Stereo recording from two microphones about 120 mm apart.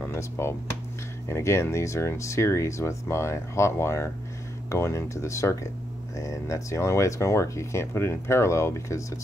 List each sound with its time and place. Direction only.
0.0 s speech: 20° left (ahead or behind)